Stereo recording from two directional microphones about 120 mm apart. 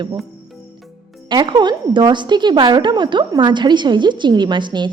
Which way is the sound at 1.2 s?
40° right (ahead or behind).